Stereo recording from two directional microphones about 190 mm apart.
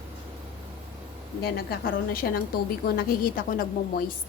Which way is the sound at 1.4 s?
55° left (ahead or behind).